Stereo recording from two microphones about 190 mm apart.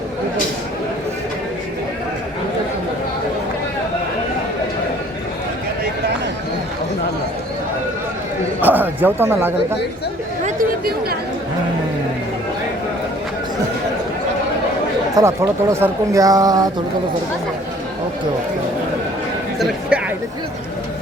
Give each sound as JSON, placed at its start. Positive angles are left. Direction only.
{"t": 8.6, "sound": "speech", "side_deg": -10}
{"t": 10.4, "sound": "chatter", "side_deg": -50}
{"t": 15.1, "sound": "speech", "side_deg": -15}